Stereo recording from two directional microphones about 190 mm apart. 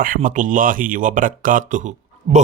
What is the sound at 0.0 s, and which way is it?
Speech, 45° right (ahead or behind).